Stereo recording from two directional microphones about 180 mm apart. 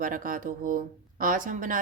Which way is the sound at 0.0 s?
50° right (ahead or behind).